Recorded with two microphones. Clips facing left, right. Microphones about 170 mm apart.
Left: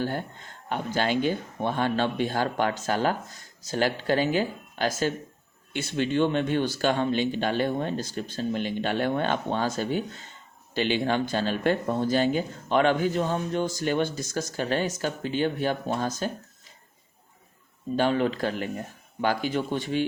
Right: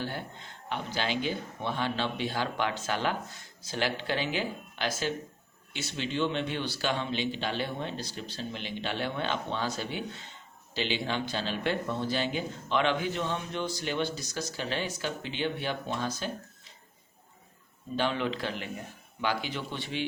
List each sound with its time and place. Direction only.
0.0 s speech: 45° left (ahead or behind)
17.9 s speech: 45° left (ahead or behind)